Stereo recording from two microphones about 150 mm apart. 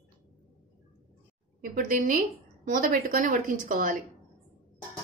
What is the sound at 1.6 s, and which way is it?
A woman's voice, 65° right (ahead or behind).